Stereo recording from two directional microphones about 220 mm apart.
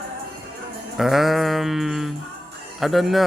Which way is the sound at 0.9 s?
Centre (ahead or behind).